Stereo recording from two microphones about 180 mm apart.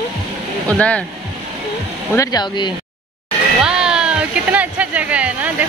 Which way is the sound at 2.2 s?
20° left (ahead or behind).